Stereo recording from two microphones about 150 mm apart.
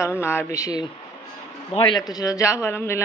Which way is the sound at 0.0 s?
15° left (ahead or behind).